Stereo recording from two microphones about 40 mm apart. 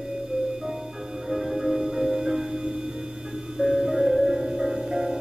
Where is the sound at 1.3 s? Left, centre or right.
Centre.